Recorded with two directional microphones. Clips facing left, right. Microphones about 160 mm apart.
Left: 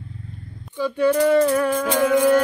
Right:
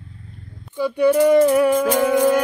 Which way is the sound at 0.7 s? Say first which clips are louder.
Right 2 dB; 10° right (ahead or behind).